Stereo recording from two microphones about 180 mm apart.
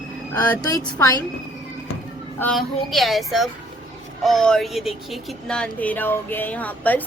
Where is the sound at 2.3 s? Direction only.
5° left (ahead or behind).